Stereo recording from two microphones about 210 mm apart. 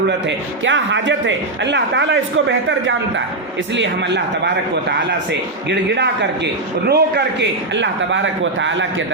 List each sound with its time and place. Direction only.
0.3 s a man's voice: 60° right (ahead or behind)
3.8 s a man's voice: 55° right (ahead or behind)